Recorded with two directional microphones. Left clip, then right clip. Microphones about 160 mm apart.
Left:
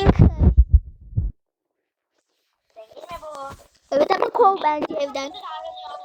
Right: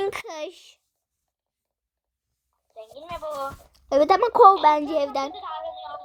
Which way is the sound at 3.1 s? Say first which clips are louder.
Right 3 dB; 50° right (ahead or behind).